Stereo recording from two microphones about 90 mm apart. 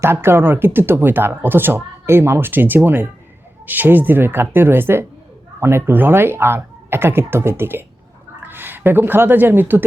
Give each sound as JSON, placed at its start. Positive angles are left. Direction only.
{"t": 0.0, "sound": "speech", "side_deg": -30}